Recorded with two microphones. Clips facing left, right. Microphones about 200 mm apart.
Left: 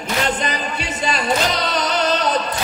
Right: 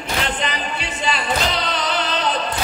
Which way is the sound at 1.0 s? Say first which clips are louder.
Left 2 dB; 45° left (ahead or behind).